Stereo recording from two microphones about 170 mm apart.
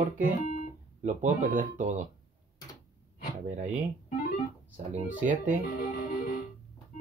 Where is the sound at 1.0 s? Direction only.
50° right (ahead or behind).